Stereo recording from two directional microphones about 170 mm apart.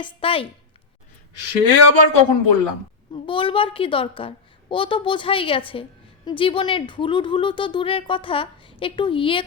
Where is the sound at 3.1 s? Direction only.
30° left (ahead or behind).